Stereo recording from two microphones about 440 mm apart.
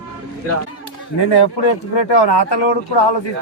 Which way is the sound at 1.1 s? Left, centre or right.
Left.